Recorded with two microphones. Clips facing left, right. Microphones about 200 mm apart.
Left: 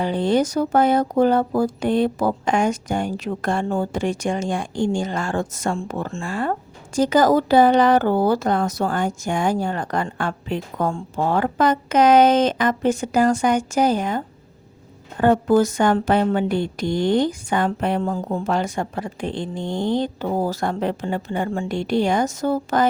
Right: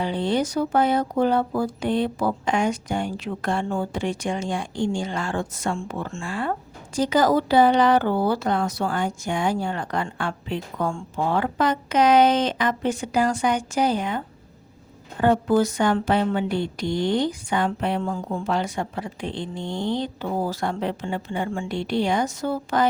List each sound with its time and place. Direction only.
0.0 s speech: 45° left (ahead or behind)